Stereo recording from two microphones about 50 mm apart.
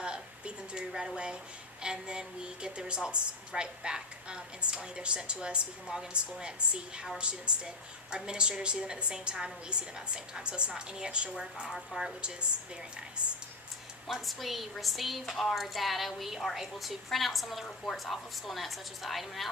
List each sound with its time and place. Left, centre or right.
0.0 s a woman's voice: centre
7.2 s a woman's voice: centre
14.1 s speech: centre